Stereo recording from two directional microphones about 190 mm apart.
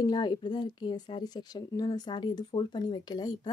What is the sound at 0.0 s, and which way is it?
A woman's voice, 20° left (ahead or behind).